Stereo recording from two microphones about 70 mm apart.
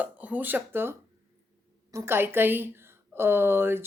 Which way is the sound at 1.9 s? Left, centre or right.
Right.